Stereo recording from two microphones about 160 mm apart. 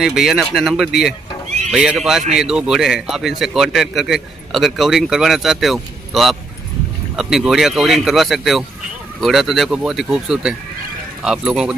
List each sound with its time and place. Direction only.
0.0 s a man's voice: centre (ahead or behind)